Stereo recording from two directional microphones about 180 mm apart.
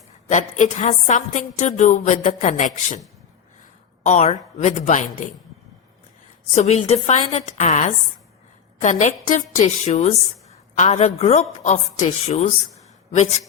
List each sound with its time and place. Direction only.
0.3 s a woman's voice: 45° left (ahead or behind)
4.0 s a woman's voice: 40° left (ahead or behind)
6.5 s a woman's voice: 40° left (ahead or behind)